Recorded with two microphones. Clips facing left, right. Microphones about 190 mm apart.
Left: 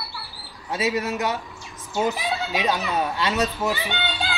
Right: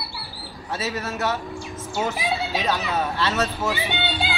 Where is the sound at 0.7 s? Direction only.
10° left (ahead or behind).